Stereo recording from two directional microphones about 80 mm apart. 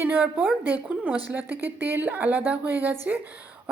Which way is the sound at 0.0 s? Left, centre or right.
Right.